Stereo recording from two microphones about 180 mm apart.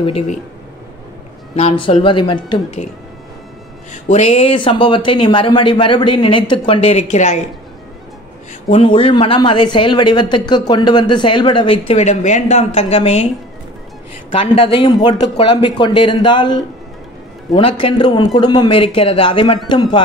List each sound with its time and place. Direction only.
0.0 s speech: 35° left (ahead or behind)
1.5 s speech: 35° left (ahead or behind)
3.9 s speech: 35° left (ahead or behind)
8.6 s speech: 35° left (ahead or behind)
14.5 s speech: 30° left (ahead or behind)